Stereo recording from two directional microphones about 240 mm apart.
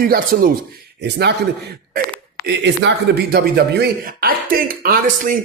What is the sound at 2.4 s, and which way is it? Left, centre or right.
Speech, right.